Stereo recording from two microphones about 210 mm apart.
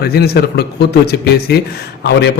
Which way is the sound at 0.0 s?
50° left (ahead or behind).